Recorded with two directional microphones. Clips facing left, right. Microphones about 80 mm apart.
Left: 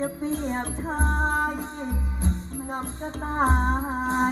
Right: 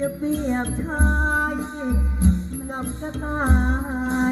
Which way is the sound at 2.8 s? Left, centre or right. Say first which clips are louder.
Right 3 dB; left.